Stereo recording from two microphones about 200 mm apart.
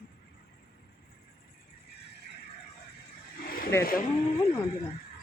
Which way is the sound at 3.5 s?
45° left (ahead or behind).